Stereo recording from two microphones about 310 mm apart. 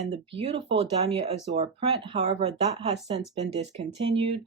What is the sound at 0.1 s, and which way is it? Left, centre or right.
Speech, centre.